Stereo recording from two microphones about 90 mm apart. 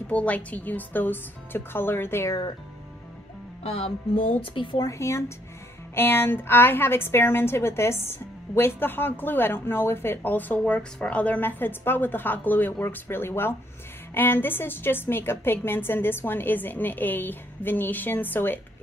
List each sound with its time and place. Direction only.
0.1 s a woman's voice: 15° left (ahead or behind)
3.6 s music: 90° left
4.4 s speech: 65° left (ahead or behind)
4.8 s a woman's voice: 30° left (ahead or behind)